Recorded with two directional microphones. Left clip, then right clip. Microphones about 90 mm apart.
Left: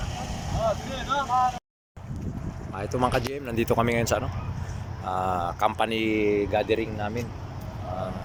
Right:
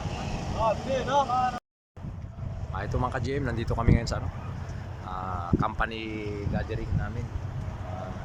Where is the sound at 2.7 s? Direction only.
30° left (ahead or behind).